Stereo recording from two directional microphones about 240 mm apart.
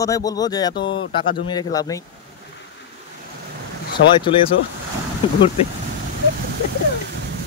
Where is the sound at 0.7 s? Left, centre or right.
Left.